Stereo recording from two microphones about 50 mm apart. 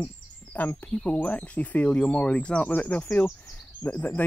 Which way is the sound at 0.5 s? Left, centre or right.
Left.